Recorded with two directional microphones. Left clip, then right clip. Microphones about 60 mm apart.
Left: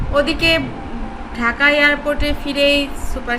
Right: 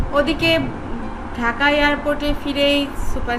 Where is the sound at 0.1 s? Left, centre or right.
Centre.